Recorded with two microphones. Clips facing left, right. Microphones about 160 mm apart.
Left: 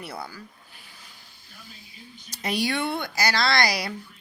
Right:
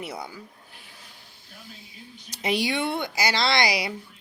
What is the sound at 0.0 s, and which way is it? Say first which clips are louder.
Speech: right 1 dB; 20° right (ahead or behind).